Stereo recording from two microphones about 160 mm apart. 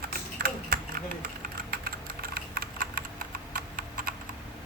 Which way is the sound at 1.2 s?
65° right (ahead or behind).